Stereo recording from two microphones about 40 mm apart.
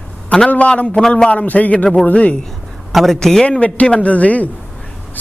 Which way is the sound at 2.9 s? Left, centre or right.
Centre.